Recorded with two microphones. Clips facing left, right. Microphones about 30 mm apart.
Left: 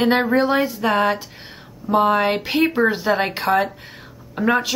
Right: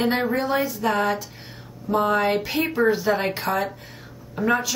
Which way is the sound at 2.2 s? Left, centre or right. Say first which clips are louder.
Left 4 dB; left.